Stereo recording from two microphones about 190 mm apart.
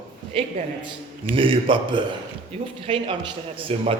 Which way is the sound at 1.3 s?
25° right (ahead or behind).